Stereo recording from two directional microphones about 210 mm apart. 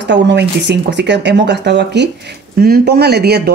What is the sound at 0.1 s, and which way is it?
Speech, 55° right (ahead or behind).